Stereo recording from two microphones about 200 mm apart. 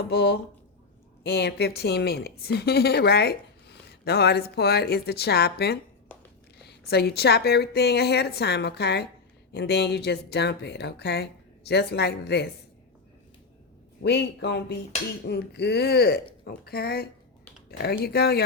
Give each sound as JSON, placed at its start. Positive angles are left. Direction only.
{"t": 0.1, "sound": "a woman's voice", "side_deg": 55}
{"t": 14.0, "sound": "a woman's voice", "side_deg": 60}